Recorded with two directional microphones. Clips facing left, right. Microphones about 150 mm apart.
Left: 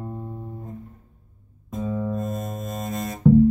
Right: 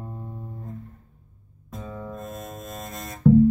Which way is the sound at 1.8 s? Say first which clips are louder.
Left 9 dB; 10° left (ahead or behind).